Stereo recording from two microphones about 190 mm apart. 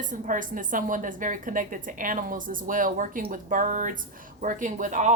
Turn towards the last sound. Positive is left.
turn(degrees=-40)  # may be behind; listen again after turning